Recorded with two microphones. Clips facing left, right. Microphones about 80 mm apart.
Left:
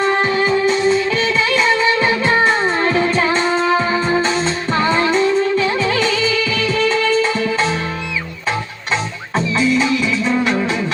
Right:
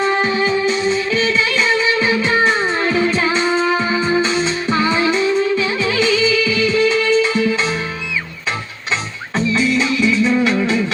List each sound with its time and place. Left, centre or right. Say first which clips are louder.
0.0 s music: left 1 dB; left
3.4 s music: left 1 dB; centre
4.2 s music: even; left
9.6 s music: left 2 dB; left